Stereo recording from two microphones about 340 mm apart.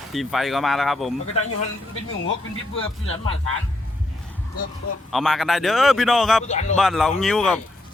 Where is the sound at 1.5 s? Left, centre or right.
Left.